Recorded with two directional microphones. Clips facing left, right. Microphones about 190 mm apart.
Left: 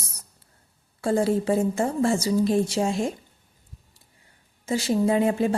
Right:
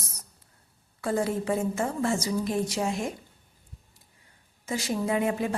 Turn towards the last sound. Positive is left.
turn(degrees=30)  # may be behind; listen again after turning